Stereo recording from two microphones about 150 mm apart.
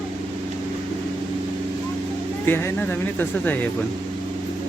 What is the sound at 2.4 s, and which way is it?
Speech, 15° left (ahead or behind).